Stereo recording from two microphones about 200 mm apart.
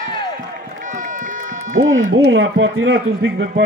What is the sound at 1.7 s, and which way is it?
A man's voice, 75° right (ahead or behind).